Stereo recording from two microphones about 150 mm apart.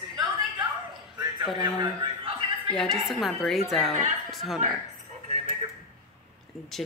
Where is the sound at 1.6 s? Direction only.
30° right (ahead or behind).